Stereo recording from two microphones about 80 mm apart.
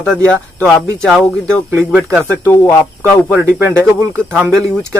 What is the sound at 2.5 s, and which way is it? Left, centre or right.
Speech, centre.